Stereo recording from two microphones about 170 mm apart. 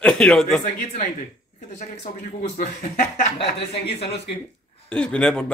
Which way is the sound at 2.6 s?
50° left (ahead or behind).